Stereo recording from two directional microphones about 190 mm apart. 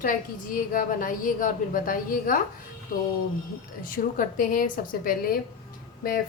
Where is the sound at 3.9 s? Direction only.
45° left (ahead or behind).